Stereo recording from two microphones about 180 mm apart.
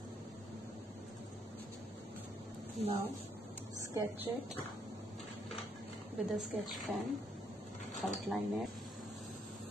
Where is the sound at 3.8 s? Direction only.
15° right (ahead or behind).